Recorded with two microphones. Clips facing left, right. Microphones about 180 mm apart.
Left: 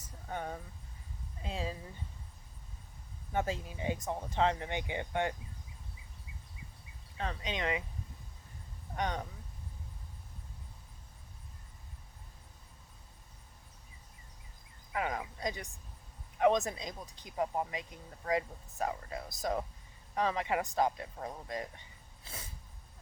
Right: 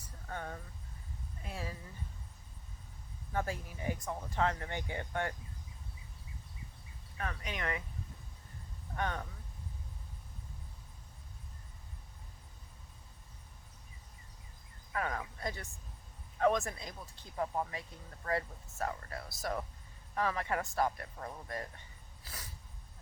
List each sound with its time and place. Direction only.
0.0 s a sound: 20° left (ahead or behind)
1.4 s speech: 20° left (ahead or behind)
3.3 s speech: 20° left (ahead or behind)
7.2 s speech: 20° left (ahead or behind)
9.0 s speech: 20° left (ahead or behind)
14.9 s speech: 15° left (ahead or behind)
22.2 s a sound: 20° left (ahead or behind)